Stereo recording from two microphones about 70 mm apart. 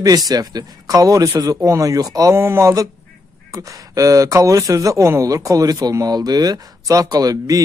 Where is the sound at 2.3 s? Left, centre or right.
Right.